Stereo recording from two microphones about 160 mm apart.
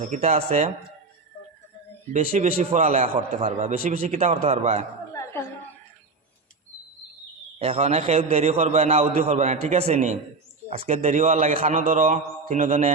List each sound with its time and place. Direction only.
0.1 s a man's voice: 45° right (ahead or behind)
2.1 s a man's voice: 45° right (ahead or behind)
7.6 s a man's voice: 40° right (ahead or behind)